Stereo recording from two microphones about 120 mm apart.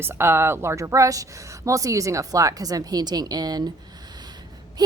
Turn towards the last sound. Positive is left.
turn(degrees=-35)  # may be behind; listen again after turning